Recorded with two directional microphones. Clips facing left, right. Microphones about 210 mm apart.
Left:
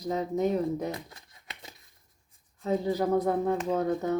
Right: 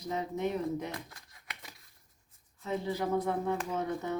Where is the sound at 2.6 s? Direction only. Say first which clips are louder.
Left 6 dB; 35° left (ahead or behind).